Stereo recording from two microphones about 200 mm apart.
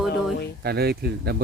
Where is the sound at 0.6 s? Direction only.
50° right (ahead or behind).